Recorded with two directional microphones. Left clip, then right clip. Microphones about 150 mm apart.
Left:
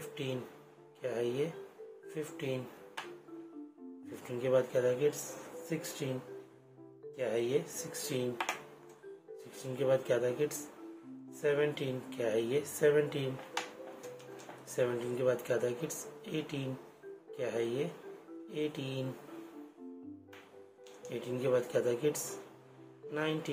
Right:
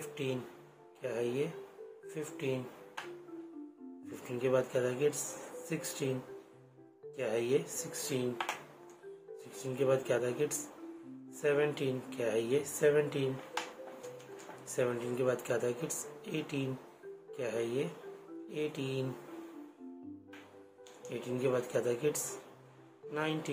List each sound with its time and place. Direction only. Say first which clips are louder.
1.0 s speech: even; 5° left (ahead or behind)
4.1 s speech: left 1 dB; centre (ahead or behind)
7.2 s speech: even; 10° right (ahead or behind)
8.4 s speech: left 1 dB; 50° left (ahead or behind)
9.5 s speech: even; centre (ahead or behind)
14.7 s speech: left 1 dB; centre (ahead or behind)
21.1 s speech: left 1 dB; centre (ahead or behind)